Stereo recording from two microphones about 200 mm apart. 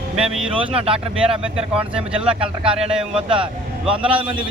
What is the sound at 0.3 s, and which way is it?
Speech, centre (ahead or behind).